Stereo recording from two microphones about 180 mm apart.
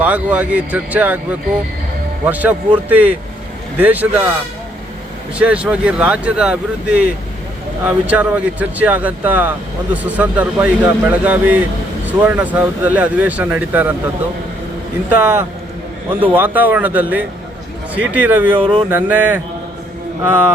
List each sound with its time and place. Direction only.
0.0 s speech: 10° right (ahead or behind)
5.4 s speech: 5° right (ahead or behind)
15.1 s speech: 15° right (ahead or behind)
18.6 s a sound: 30° right (ahead or behind)
18.9 s speech: 10° right (ahead or behind)